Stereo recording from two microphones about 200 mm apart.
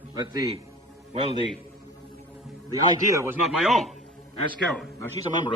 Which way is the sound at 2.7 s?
15° right (ahead or behind).